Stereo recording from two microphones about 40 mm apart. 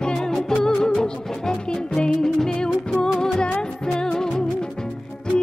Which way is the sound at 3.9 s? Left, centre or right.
Centre.